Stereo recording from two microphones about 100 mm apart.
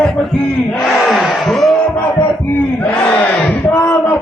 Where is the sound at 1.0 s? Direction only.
Centre (ahead or behind).